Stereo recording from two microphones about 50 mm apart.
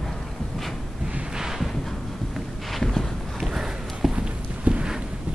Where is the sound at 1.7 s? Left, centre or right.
Centre.